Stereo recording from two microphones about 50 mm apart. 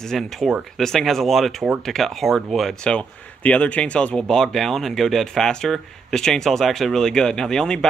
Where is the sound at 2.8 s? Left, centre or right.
Left.